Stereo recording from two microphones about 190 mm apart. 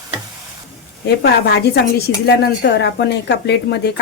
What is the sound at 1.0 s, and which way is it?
A woman's voice, 60° left (ahead or behind).